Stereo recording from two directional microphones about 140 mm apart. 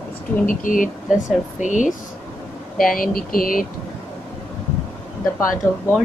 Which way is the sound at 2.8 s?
90° left.